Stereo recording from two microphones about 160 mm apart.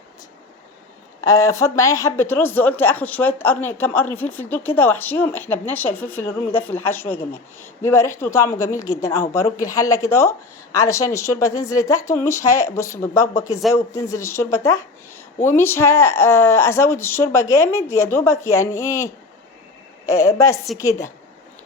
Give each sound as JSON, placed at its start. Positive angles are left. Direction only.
{"t": 1.2, "sound": "a woman's voice", "side_deg": 20}